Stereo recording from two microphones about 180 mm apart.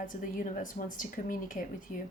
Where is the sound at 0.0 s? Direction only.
50° left (ahead or behind).